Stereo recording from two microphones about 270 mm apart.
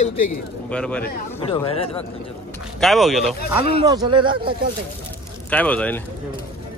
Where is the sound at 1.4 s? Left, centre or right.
Centre.